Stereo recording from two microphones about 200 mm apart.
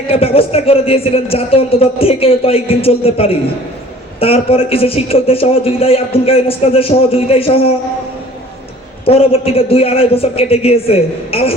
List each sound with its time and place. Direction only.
0.1 s a man's voice: 30° left (ahead or behind)
9.0 s a man's voice: 30° left (ahead or behind)